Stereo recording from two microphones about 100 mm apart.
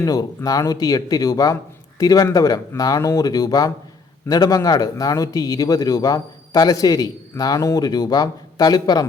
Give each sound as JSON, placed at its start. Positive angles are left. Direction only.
{"t": 0.0, "sound": "a man's voice", "side_deg": 35}